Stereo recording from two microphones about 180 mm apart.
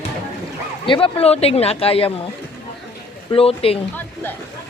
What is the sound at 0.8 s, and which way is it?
Speech, 30° left (ahead or behind).